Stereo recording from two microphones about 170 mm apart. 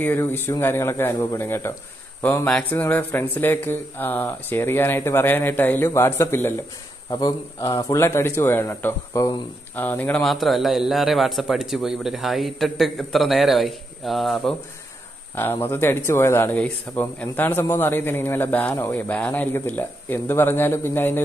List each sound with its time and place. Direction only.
0.0 s a man's voice: 15° left (ahead or behind)
15.3 s speech: 15° left (ahead or behind)